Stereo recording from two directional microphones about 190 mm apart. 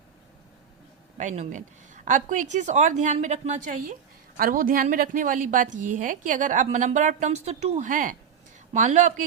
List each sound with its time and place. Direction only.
1.2 s a woman's voice: 40° right (ahead or behind)